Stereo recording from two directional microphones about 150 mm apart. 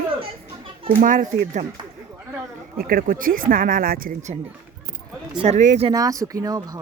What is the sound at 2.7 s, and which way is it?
Speech, 75° right (ahead or behind).